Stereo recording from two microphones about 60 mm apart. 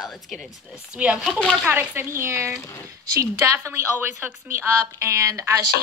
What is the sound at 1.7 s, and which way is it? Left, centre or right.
Speech, right.